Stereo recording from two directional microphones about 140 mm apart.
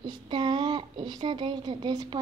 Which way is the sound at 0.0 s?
35° right (ahead or behind).